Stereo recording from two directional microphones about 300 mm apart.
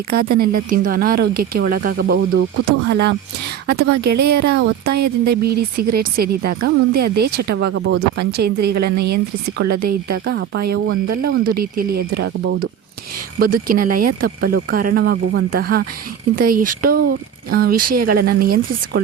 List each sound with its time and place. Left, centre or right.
0.1 s a woman's voice: right